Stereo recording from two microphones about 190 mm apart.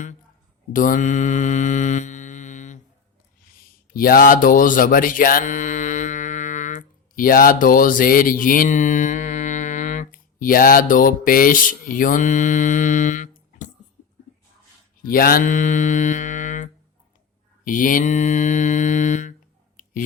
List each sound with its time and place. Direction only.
0.7 s mantra: 45° left (ahead or behind)
3.9 s mantra: 50° left (ahead or behind)
15.0 s mantra: 50° left (ahead or behind)
17.7 s mantra: 45° left (ahead or behind)
19.7 s a sound: 45° left (ahead or behind)